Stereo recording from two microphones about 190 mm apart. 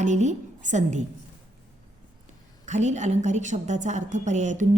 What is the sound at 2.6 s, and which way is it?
A woman's voice, 40° right (ahead or behind).